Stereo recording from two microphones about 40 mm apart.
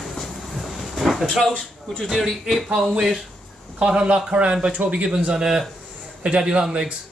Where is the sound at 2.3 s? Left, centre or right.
Centre.